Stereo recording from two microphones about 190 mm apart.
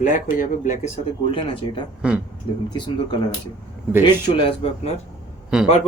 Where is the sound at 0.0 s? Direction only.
45° left (ahead or behind).